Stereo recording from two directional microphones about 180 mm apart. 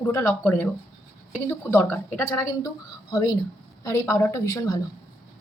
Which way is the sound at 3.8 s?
15° left (ahead or behind).